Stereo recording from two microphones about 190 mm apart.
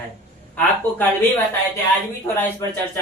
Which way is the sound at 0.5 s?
10° left (ahead or behind).